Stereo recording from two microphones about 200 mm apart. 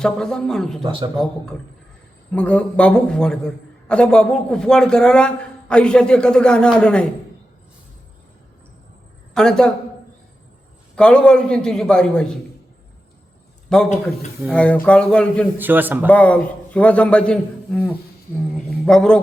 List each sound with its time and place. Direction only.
0.0 s a man's voice: 5° left (ahead or behind)
0.8 s a man's voice: 25° right (ahead or behind)
1.1 s a man's voice: 5° left (ahead or behind)
9.3 s a woman's voice: 5° left (ahead or behind)
10.9 s a man's voice: 5° left (ahead or behind)
13.7 s a man's voice: 5° left (ahead or behind)
15.5 s a man's voice: 10° right (ahead or behind)
16.0 s a man's voice: 5° left (ahead or behind)